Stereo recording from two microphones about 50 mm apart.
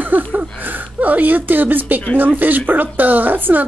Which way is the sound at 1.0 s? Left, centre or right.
Right.